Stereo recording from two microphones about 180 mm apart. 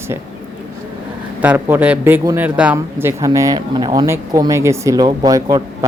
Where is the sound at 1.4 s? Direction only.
10° right (ahead or behind).